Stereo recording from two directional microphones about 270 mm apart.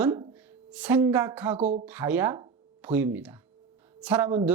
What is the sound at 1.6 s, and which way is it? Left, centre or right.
Speech, right.